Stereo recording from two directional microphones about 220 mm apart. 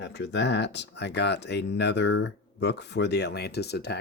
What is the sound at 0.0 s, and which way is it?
Speech, 50° left (ahead or behind).